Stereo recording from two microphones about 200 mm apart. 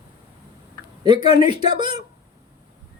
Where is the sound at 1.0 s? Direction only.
20° right (ahead or behind).